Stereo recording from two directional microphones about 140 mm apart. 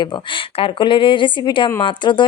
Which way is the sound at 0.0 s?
40° left (ahead or behind).